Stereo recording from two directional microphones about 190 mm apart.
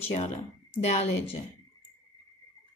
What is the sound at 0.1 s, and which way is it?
Speech, 35° left (ahead or behind).